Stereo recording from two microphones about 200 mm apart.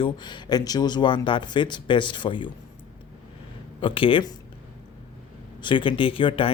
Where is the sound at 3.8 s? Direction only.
25° left (ahead or behind).